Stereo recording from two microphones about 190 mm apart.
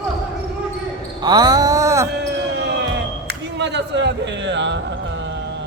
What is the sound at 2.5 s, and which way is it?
Basketball bounce, 65° right (ahead or behind).